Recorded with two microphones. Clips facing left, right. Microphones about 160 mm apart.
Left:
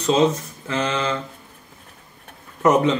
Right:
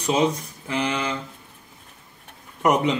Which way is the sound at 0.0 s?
15° right (ahead or behind).